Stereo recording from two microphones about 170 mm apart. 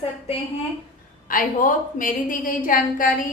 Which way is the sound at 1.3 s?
55° left (ahead or behind).